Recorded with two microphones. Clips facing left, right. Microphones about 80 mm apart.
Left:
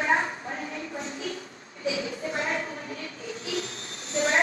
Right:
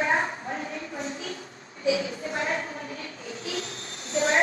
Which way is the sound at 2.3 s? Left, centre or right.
Right.